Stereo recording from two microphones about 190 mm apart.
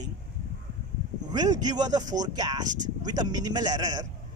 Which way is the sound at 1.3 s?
20° right (ahead or behind).